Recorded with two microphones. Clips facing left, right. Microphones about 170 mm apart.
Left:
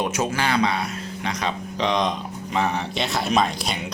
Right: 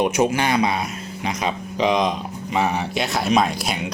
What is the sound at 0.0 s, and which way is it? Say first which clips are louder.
Speech: right 5 dB; 15° right (ahead or behind).